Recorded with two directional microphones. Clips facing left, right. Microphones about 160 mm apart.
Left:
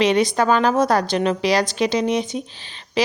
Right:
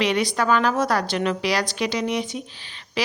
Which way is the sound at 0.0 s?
25° left (ahead or behind).